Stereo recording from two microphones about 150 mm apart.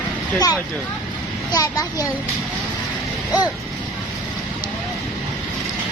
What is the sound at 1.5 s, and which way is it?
Speech, 25° left (ahead or behind).